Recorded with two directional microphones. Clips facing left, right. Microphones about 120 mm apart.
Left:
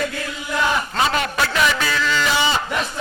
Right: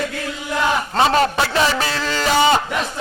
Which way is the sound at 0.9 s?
35° right (ahead or behind).